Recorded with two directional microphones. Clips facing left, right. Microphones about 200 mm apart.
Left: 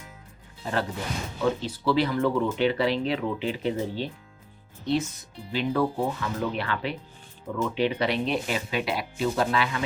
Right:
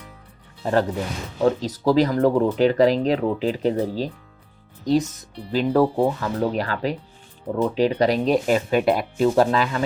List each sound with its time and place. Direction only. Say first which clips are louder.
0.6 s speech: right 8 dB; 45° right (ahead or behind)